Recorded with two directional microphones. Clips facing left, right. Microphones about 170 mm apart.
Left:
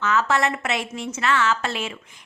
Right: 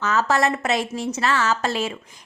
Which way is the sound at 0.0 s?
40° right (ahead or behind).